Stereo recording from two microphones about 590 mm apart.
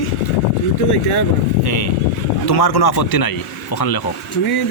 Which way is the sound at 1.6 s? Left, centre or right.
Left.